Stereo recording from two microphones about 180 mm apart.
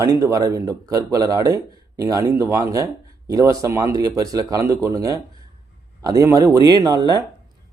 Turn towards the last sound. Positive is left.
turn(degrees=-20)  # may be behind; listen again after turning